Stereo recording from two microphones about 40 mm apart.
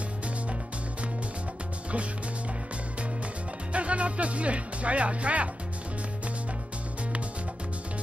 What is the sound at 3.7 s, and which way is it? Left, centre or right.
Speech, right.